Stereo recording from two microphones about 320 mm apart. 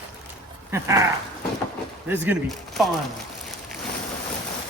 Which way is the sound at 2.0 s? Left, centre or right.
Centre.